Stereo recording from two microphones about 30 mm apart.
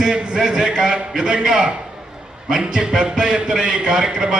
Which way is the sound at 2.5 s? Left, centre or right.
Right.